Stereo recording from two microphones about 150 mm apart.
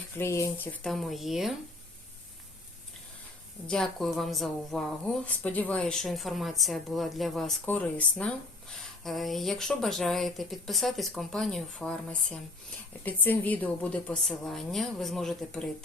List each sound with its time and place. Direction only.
0.2 s speech: 20° left (ahead or behind)
0.9 s a woman's voice: centre (ahead or behind)
3.7 s a woman's voice: 5° left (ahead or behind)